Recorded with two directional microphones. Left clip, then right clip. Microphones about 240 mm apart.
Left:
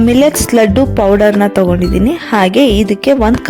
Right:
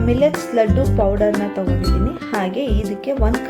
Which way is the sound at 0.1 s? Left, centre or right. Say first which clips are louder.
Left 3 dB; left.